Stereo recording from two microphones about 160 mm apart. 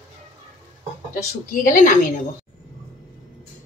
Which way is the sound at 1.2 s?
55° left (ahead or behind).